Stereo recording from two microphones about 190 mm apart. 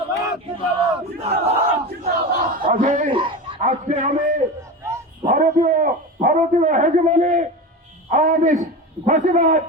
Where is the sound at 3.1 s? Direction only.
25° right (ahead or behind).